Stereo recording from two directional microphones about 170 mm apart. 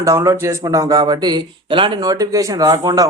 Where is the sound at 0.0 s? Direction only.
15° right (ahead or behind).